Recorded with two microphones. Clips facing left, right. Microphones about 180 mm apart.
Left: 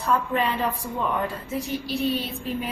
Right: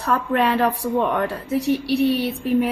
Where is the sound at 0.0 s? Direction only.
70° right (ahead or behind).